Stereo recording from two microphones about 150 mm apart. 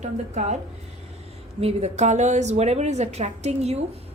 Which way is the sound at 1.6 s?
50° right (ahead or behind).